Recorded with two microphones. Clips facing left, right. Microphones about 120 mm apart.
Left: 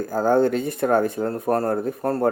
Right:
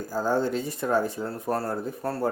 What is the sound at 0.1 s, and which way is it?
Speech, 55° left (ahead or behind).